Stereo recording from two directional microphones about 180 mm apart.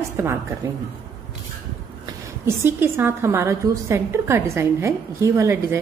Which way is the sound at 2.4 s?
15° right (ahead or behind).